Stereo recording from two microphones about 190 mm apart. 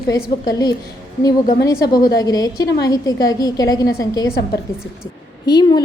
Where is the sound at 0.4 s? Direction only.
20° left (ahead or behind).